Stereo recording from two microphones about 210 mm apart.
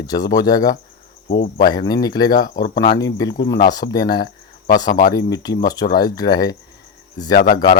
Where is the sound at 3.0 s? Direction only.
15° left (ahead or behind).